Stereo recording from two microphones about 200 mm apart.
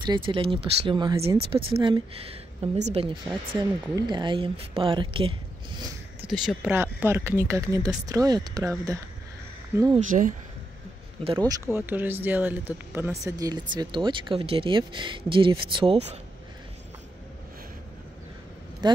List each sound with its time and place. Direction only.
0.0 s speech: 25° right (ahead or behind)
6.3 s speech: 5° right (ahead or behind)
9.9 s speech: 40° right (ahead or behind)
11.2 s speech: 20° right (ahead or behind)
11.7 s speech: 10° right (ahead or behind); by 16.2 s 30° right (ahead or behind)